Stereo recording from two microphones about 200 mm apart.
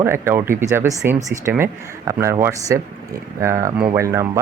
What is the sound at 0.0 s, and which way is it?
Speech, 10° right (ahead or behind).